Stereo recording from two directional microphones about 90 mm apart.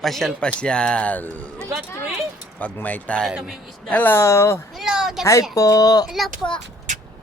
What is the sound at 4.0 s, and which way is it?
Speech, 25° left (ahead or behind).